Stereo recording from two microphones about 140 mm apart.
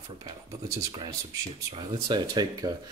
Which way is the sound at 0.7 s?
20° right (ahead or behind).